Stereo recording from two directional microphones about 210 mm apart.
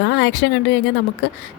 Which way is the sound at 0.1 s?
55° left (ahead or behind).